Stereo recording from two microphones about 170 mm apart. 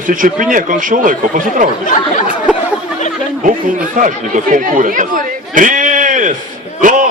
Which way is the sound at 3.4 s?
50° right (ahead or behind).